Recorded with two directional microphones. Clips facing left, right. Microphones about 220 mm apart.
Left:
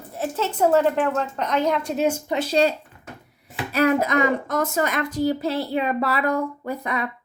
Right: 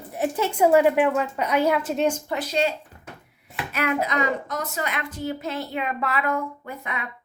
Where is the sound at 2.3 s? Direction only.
30° left (ahead or behind).